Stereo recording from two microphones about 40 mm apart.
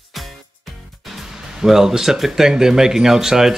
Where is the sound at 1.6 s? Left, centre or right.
Centre.